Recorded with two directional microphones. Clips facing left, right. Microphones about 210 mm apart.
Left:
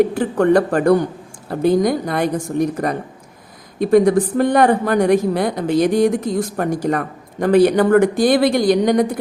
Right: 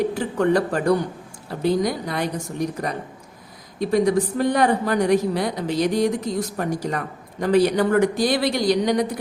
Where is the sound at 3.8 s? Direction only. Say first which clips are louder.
Left 6 dB; 55° left (ahead or behind).